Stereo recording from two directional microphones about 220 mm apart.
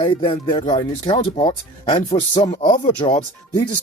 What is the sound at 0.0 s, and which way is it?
Speech, 25° left (ahead or behind).